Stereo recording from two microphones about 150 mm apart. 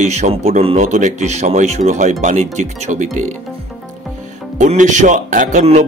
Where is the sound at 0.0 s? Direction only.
50° right (ahead or behind).